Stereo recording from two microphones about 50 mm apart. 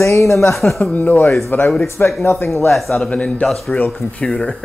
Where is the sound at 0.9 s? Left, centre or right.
Left.